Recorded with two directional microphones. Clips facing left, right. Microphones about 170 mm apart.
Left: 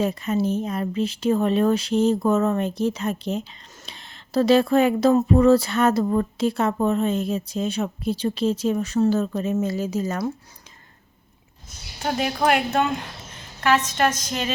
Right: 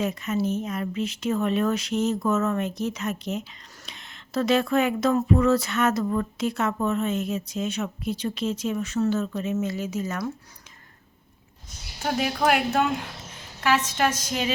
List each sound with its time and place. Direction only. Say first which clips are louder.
0.0 s speech: left 3 dB; 30° left (ahead or behind)
12.0 s a woman's voice: left 2 dB; 5° right (ahead or behind)